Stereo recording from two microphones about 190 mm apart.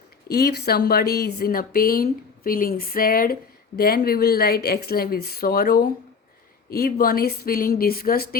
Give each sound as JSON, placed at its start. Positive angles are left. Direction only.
{"t": 0.3, "sound": "speech", "side_deg": 55}